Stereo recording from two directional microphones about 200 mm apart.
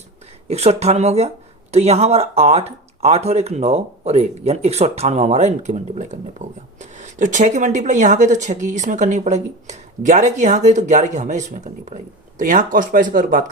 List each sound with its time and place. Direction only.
0.4 s speech: 30° right (ahead or behind)